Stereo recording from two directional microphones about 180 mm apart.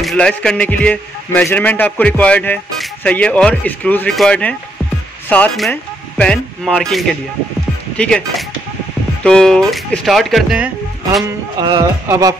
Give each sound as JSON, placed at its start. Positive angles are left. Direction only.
{"t": 0.0, "sound": "a man's voice", "side_deg": 5}
{"t": 11.6, "sound": "speech", "side_deg": -20}